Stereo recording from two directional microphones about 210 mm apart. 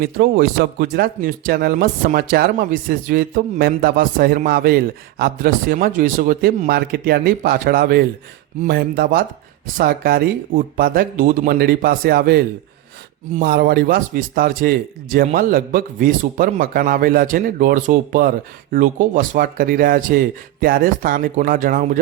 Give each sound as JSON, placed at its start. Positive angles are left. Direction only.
{"t": 0.0, "sound": "speech", "side_deg": -50}